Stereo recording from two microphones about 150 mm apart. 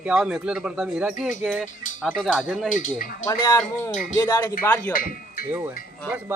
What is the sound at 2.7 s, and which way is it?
Speech, 60° left (ahead or behind).